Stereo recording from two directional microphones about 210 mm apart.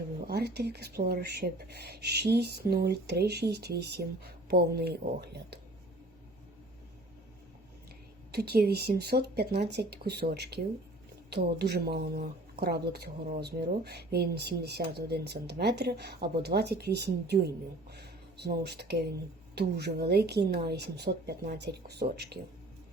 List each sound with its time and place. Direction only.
0.3 s speech: 50° right (ahead or behind)
8.3 s speech: 50° right (ahead or behind)